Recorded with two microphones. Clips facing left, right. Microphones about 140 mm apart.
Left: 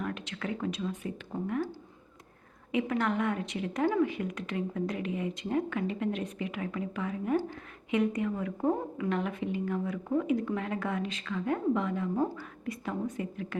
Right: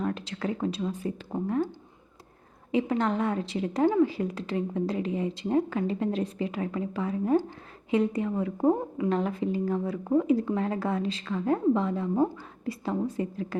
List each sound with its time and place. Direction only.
0.0 s a woman's voice: 35° right (ahead or behind)
2.7 s a woman's voice: 30° right (ahead or behind)